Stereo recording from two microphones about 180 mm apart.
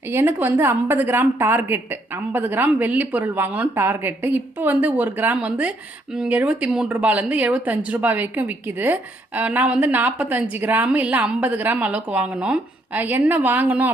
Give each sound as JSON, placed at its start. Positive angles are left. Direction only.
{"t": 0.1, "sound": "speech", "side_deg": -10}